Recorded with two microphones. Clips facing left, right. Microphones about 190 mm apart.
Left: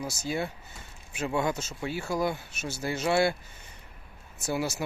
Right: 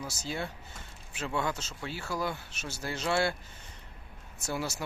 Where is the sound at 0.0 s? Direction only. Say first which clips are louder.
Left 5 dB; 10° left (ahead or behind).